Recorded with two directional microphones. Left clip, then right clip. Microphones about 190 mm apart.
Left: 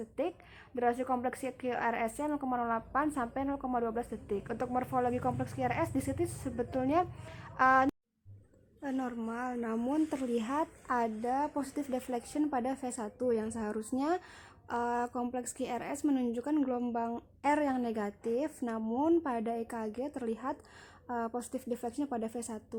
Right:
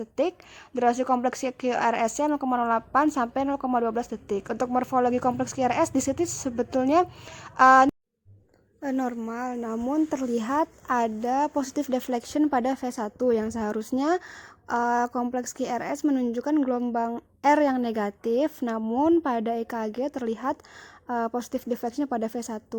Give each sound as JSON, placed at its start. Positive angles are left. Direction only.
{"t": 0.8, "sound": "a woman's voice", "side_deg": -55}
{"t": 8.8, "sound": "a woman's voice", "side_deg": -30}
{"t": 9.6, "sound": "speech", "side_deg": -10}
{"t": 9.9, "sound": "speech", "side_deg": -30}